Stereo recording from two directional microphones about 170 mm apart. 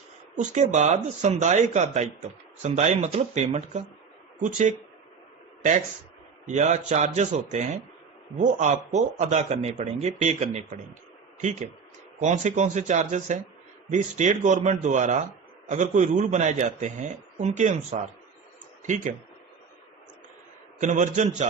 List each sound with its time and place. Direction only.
0.3 s speech: 45° right (ahead or behind)
6.5 s speech: 45° right (ahead or behind)
12.2 s speech: 45° right (ahead or behind)
18.8 s speech: 45° right (ahead or behind)
20.7 s speech: 45° right (ahead or behind)